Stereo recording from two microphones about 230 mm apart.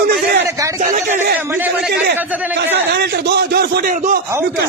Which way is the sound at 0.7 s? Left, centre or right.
Right.